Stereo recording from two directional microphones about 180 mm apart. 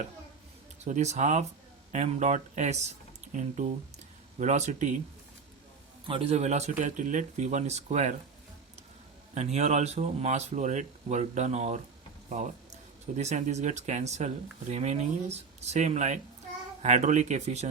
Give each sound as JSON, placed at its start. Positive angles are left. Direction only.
{"t": 0.9, "sound": "speech", "side_deg": -40}
{"t": 6.1, "sound": "speech", "side_deg": -30}
{"t": 9.3, "sound": "speech", "side_deg": -40}